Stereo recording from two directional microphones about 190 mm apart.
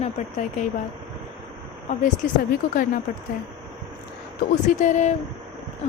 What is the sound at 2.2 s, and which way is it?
Speech, 45° left (ahead or behind).